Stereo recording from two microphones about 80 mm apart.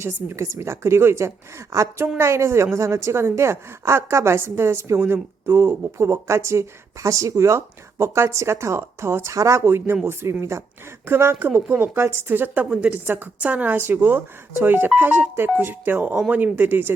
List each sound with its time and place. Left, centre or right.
0.0 s a woman's voice: right
9.6 s a woman's voice: right